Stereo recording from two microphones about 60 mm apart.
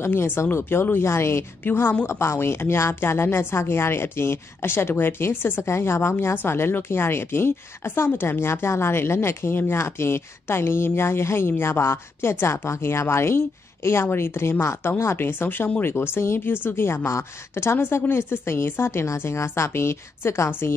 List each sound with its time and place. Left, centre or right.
0.0 s speech: left
1.6 s speech: left